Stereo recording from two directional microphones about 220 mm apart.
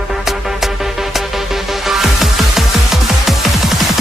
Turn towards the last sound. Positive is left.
turn(degrees=0)  # may be behind; listen again after turning